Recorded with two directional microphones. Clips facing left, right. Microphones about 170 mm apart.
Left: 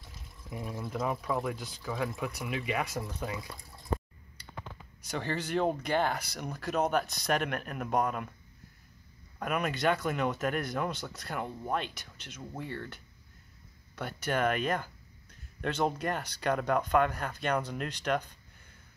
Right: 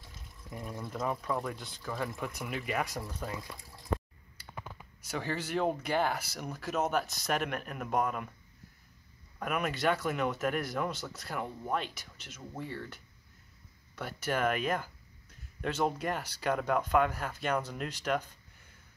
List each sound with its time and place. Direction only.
0.5 s speech: 5° left (ahead or behind)
4.4 s a sound: 5° right (ahead or behind)
5.0 s speech: 5° right (ahead or behind)
9.4 s speech: centre (ahead or behind)